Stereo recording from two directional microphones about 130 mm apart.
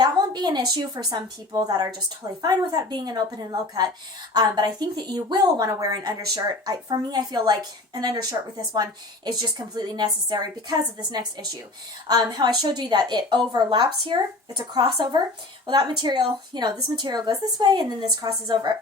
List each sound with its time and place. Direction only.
0.0 s a woman's voice: 30° right (ahead or behind)